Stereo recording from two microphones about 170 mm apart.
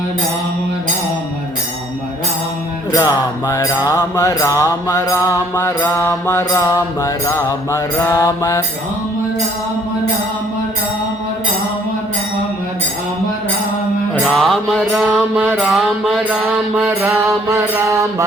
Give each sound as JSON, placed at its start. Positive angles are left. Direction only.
{"t": 2.9, "sound": "mantra", "side_deg": 20}
{"t": 14.3, "sound": "mantra", "side_deg": 0}